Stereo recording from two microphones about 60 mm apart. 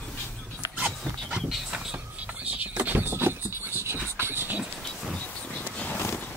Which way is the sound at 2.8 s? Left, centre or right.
Right.